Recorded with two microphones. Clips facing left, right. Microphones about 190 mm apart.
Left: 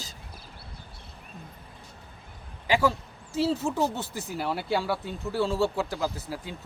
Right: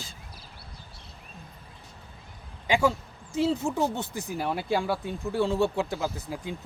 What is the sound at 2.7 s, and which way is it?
Speech, 15° right (ahead or behind).